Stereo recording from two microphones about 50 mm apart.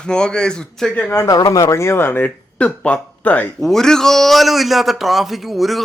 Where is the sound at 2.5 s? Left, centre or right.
Left.